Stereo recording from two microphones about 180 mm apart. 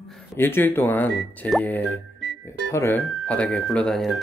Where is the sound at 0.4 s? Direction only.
10° left (ahead or behind).